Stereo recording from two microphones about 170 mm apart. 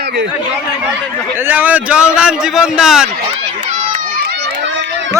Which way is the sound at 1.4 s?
10° right (ahead or behind).